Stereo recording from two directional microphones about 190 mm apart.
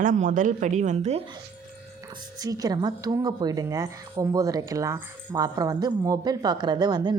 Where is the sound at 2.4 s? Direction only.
20° right (ahead or behind).